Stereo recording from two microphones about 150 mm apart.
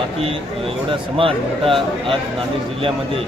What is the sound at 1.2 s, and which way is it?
Speech, 35° right (ahead or behind).